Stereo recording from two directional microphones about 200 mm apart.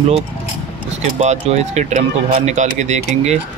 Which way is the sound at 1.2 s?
35° right (ahead or behind).